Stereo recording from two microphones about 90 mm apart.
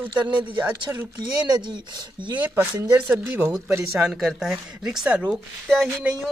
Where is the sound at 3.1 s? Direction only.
20° right (ahead or behind).